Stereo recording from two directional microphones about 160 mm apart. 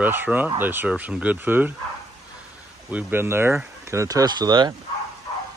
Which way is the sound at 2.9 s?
15° right (ahead or behind).